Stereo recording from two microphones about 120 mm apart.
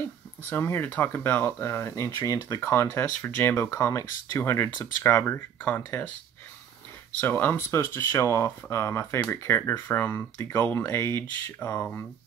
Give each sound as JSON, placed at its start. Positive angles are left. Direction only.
{"t": 0.4, "sound": "speech", "side_deg": 15}
{"t": 7.2, "sound": "speech", "side_deg": 15}